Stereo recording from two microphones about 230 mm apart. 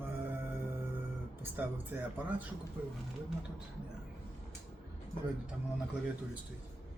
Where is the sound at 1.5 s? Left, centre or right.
Centre.